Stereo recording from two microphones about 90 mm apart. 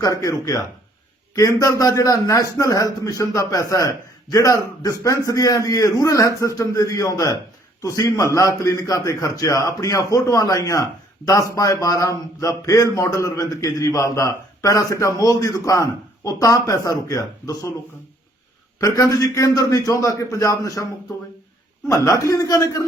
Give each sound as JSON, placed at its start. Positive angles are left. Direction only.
{"t": 0.2, "sound": "a man's voice", "side_deg": 40}
{"t": 18.8, "sound": "a man's voice", "side_deg": 40}
{"t": 21.8, "sound": "a man's voice", "side_deg": 35}